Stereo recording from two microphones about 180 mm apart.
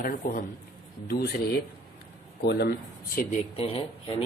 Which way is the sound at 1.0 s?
60° left (ahead or behind).